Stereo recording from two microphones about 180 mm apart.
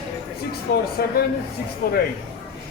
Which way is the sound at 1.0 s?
60° left (ahead or behind).